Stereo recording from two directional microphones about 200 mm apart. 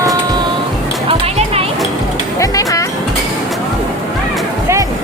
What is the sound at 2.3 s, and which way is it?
Music, 15° left (ahead or behind).